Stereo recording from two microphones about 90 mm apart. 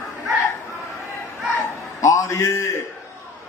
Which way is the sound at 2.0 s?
35° left (ahead or behind).